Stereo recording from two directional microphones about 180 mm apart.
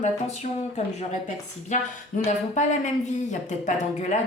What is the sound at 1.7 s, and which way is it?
Speech, 40° left (ahead or behind).